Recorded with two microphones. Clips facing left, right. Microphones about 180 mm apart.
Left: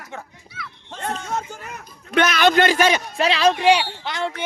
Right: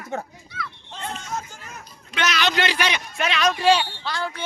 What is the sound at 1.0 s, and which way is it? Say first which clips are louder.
A man's voice: left 5 dB; 60° left (ahead or behind).